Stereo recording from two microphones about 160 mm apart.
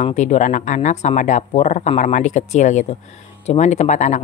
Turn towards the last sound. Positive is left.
turn(degrees=50)  # may be behind; listen again after turning